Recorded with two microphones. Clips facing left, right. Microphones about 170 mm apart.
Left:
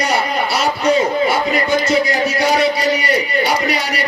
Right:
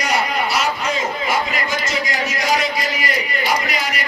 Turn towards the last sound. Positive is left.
turn(degrees=35)  # may be behind; listen again after turning